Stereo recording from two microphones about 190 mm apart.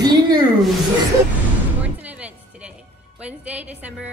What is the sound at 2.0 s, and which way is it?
Music, 10° right (ahead or behind).